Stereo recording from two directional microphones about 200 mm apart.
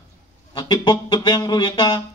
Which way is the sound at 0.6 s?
20° left (ahead or behind).